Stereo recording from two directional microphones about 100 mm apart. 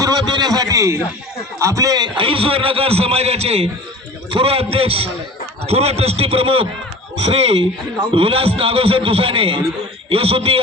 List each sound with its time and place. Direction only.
0.0 s a man's voice: 45° right (ahead or behind)
2.1 s a man's voice: 65° right (ahead or behind); by 3.7 s 90° right
4.3 s a man's voice: 70° right (ahead or behind)
5.6 s a man's voice: 90° right; by 6.7 s 65° right (ahead or behind)
7.2 s speech: 90° right
8.1 s a man's voice: 70° right (ahead or behind)